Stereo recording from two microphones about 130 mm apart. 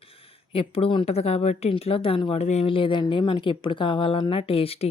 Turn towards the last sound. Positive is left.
turn(degrees=50)  # may be behind; listen again after turning